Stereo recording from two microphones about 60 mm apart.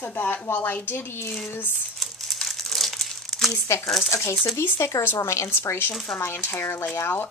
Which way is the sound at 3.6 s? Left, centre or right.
Left.